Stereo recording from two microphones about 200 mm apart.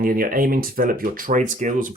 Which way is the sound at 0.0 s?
45° right (ahead or behind).